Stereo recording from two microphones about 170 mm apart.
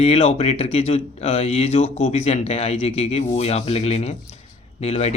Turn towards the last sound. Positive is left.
turn(degrees=40)  # may be behind; listen again after turning